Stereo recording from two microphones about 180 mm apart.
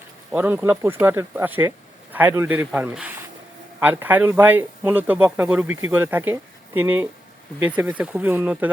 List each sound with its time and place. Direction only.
0.3 s speech: 10° right (ahead or behind)